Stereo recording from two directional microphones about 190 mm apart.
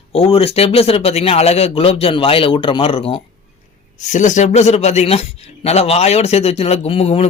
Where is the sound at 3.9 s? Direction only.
40° left (ahead or behind).